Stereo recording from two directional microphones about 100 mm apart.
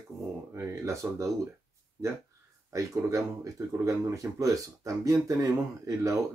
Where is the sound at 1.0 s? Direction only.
20° right (ahead or behind).